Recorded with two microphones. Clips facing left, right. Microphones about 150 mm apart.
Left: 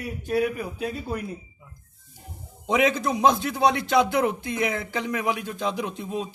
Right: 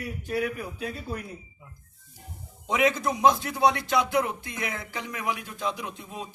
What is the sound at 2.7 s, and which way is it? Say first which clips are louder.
A man's voice: left 2 dB; 25° left (ahead or behind).